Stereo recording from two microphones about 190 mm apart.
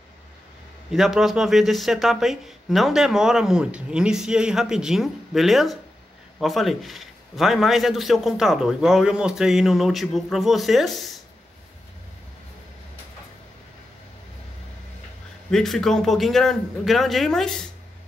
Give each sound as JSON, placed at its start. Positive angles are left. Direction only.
{"t": 0.9, "sound": "speech", "side_deg": 0}
{"t": 15.5, "sound": "speech", "side_deg": 0}